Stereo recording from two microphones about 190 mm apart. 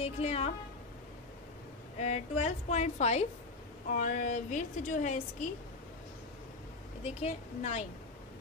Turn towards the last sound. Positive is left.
turn(degrees=35)  # may be behind; listen again after turning